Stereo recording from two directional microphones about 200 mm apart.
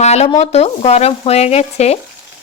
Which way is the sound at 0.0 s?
35° left (ahead or behind).